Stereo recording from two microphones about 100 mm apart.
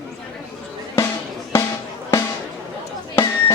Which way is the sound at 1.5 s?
25° left (ahead or behind).